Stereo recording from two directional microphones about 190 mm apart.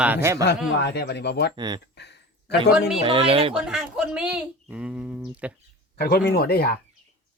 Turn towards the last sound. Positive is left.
turn(degrees=55)  # may be behind; listen again after turning